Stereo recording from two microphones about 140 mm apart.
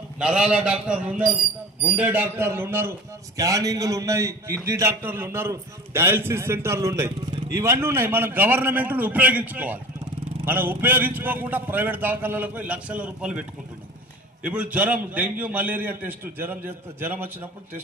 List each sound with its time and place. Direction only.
0.2 s a man's voice: 5° right (ahead or behind)
14.4 s a man's voice: 10° right (ahead or behind)